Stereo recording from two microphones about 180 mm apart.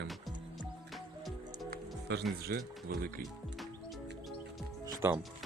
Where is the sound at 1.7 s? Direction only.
70° right (ahead or behind).